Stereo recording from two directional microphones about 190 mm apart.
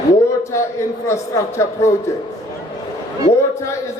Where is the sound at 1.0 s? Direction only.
15° left (ahead or behind).